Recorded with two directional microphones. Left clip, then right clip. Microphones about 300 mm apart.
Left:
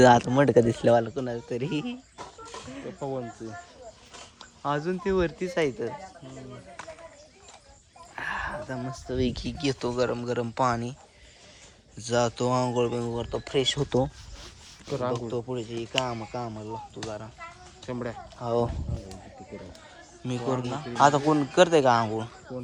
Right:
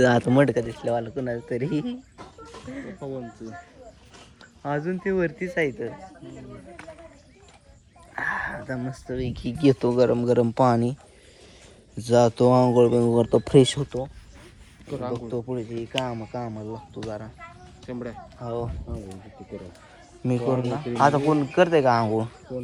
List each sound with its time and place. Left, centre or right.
0.0 s speech: centre
0.7 s speech: left
1.1 s speech: centre
4.6 s speech: centre
8.1 s speech: centre
9.1 s speech: left
9.6 s speech: centre
11.9 s speech: centre
14.8 s speech: left
15.3 s speech: centre
17.8 s speech: left
18.4 s speech: centre
20.2 s speech: centre
22.5 s speech: left